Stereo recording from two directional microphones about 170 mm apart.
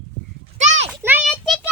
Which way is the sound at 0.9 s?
10° right (ahead or behind).